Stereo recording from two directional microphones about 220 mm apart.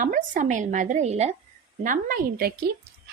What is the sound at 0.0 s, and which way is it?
A woman's voice, 35° right (ahead or behind).